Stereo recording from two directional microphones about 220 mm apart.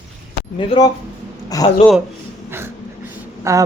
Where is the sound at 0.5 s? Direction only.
20° left (ahead or behind).